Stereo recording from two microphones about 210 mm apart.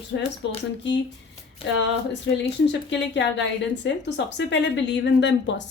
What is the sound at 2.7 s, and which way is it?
Speech, 55° left (ahead or behind).